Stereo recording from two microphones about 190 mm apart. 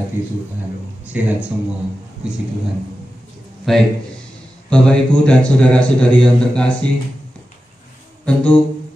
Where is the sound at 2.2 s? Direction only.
5° right (ahead or behind).